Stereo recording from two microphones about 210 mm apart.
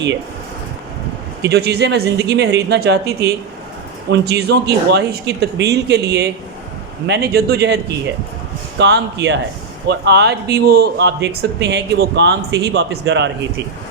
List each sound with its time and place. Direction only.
1.4 s speech: 50° right (ahead or behind)
8.8 s speech: 55° right (ahead or behind)